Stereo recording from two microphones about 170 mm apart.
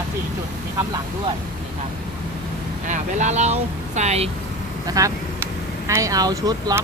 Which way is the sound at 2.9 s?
45° right (ahead or behind).